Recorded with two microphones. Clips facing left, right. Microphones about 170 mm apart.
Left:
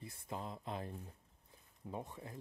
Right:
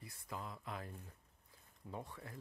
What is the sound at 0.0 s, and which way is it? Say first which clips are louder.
Speech: left 3 dB; 25° left (ahead or behind).